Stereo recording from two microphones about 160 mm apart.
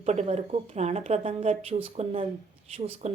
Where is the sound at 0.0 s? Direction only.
45° right (ahead or behind).